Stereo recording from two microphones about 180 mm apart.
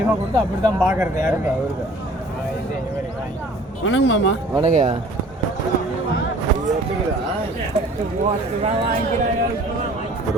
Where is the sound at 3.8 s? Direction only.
90° left.